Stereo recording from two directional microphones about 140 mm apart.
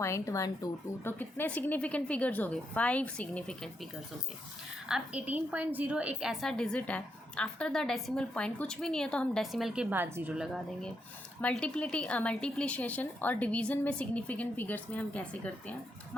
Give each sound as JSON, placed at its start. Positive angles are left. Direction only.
{"t": 0.0, "sound": "speech", "side_deg": 20}
{"t": 1.2, "sound": "a woman's voice", "side_deg": 10}
{"t": 4.9, "sound": "a woman's voice", "side_deg": -5}
{"t": 9.9, "sound": "a woman's voice", "side_deg": -15}
{"t": 10.4, "sound": "a woman's voice", "side_deg": 0}